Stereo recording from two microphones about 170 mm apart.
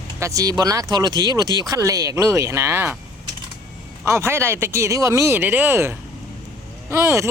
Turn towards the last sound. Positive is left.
turn(degrees=-15)  # may be behind; listen again after turning